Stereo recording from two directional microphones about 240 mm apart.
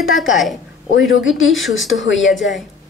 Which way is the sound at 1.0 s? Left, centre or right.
Left.